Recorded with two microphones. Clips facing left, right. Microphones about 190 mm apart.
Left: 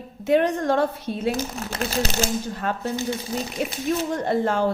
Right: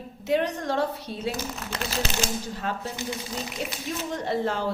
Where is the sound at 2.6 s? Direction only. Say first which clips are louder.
Left 6 dB; 55° left (ahead or behind).